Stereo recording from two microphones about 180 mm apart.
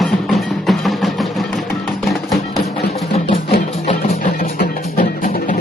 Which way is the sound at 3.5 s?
35° left (ahead or behind).